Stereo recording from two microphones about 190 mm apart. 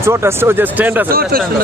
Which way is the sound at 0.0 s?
15° right (ahead or behind).